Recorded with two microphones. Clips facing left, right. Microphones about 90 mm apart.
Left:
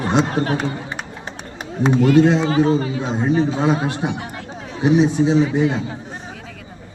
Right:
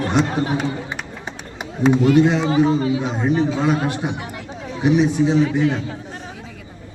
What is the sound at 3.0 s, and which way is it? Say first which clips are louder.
A man's voice: left 1 dB; 20° left (ahead or behind).